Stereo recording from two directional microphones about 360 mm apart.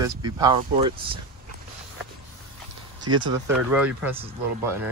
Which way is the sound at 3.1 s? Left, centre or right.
Right.